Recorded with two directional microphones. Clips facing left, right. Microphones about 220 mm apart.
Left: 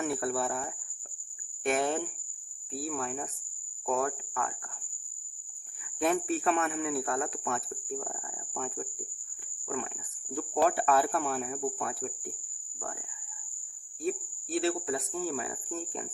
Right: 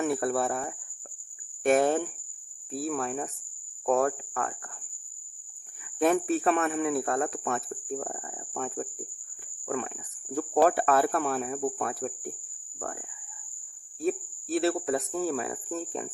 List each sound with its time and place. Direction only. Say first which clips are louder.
0.2 s speech: right 4 dB; 50° right (ahead or behind)
6.0 s speech: right 4 dB; 50° right (ahead or behind)
10.3 s speech: right 5 dB; 70° right (ahead or behind)
10.7 s speech: right 3 dB; 55° right (ahead or behind)
14.0 s speech: right 4 dB; 55° right (ahead or behind)